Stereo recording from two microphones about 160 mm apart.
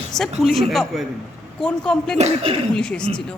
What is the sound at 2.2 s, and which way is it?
Speech, 40° right (ahead or behind).